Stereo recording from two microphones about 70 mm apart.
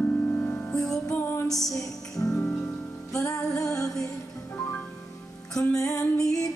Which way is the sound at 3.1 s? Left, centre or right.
Left.